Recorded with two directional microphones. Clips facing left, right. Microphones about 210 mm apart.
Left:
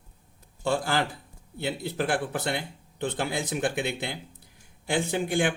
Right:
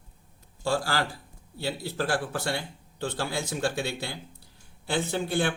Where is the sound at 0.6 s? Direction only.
20° left (ahead or behind).